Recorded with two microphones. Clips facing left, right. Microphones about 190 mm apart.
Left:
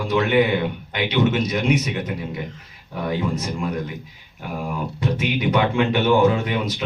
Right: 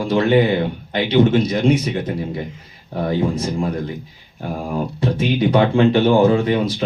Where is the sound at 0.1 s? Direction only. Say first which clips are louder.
Right 3 dB; 30° right (ahead or behind).